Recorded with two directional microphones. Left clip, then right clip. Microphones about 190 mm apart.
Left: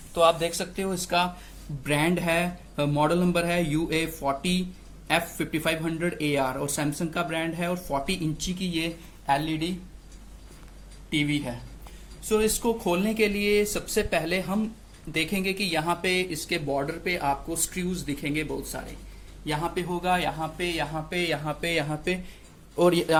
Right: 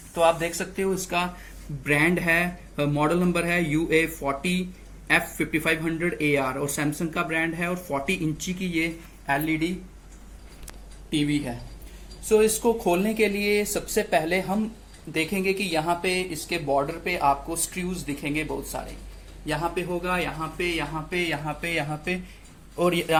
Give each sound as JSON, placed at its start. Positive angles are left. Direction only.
{"t": 0.1, "sound": "speech", "side_deg": 15}
{"t": 11.1, "sound": "speech", "side_deg": 25}
{"t": 15.1, "sound": "speech", "side_deg": 35}
{"t": 19.5, "sound": "a man's voice", "side_deg": 50}
{"t": 20.7, "sound": "speech", "side_deg": 40}